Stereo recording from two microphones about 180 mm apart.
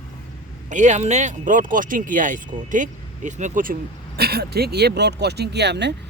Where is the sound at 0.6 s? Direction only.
40° right (ahead or behind).